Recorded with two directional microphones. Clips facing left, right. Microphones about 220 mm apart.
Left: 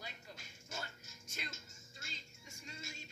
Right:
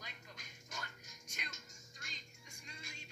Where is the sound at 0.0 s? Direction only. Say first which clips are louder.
Left 3 dB; 35° left (ahead or behind).